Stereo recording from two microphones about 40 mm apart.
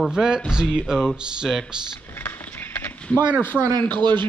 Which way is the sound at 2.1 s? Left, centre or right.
Left.